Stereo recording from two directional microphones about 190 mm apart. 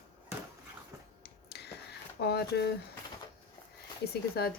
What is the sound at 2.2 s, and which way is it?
Speech, 60° left (ahead or behind).